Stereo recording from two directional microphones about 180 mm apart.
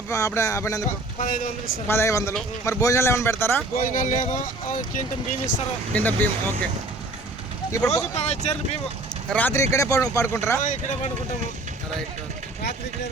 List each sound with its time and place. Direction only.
0.1 s speech: 15° left (ahead or behind)
0.9 s speech: 45° left (ahead or behind)
1.9 s speech: 15° left (ahead or behind)
3.9 s speech: 45° left (ahead or behind)
5.9 s speech: 10° left (ahead or behind)
7.7 s speech: 15° left (ahead or behind)
8.1 s speech: 35° left (ahead or behind)
9.3 s speech: 10° left (ahead or behind)
10.6 s speech: 45° left (ahead or behind)